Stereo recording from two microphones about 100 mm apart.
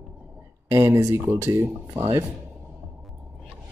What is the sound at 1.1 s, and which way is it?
Speech, 25° right (ahead or behind).